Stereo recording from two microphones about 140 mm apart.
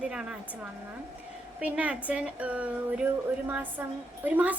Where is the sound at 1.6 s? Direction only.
10° right (ahead or behind).